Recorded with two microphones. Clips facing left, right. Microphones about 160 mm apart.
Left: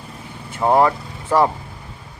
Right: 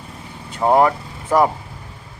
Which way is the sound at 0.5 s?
20° right (ahead or behind).